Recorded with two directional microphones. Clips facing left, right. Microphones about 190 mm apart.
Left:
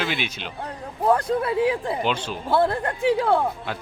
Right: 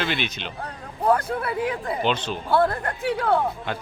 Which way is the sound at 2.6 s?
30° left (ahead or behind).